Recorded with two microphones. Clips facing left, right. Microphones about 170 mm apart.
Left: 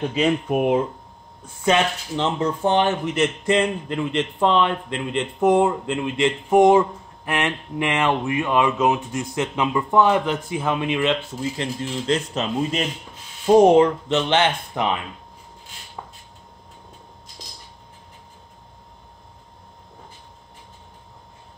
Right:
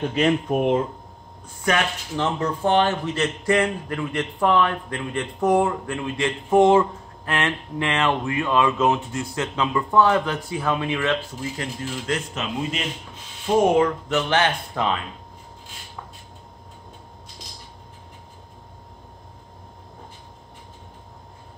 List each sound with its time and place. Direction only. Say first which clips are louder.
0.2 s speech: even; 10° left (ahead or behind)
1.6 s speech: left 3 dB; 20° left (ahead or behind)